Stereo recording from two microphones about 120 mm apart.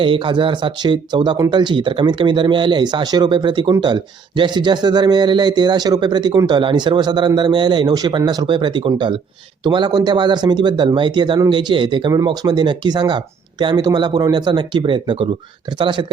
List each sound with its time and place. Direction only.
0.0 s speech: 45° right (ahead or behind)